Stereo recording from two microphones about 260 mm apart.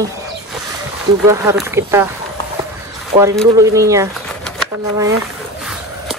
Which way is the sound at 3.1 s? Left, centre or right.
Right.